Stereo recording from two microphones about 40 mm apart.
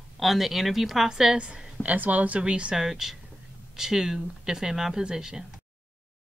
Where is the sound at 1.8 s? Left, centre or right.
Right.